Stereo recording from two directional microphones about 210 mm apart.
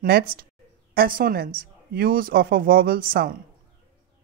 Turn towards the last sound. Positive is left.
turn(degrees=-45)  # may be behind; listen again after turning